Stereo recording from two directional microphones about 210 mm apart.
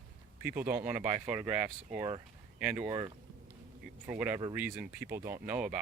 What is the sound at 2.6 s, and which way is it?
Speech, 5° right (ahead or behind).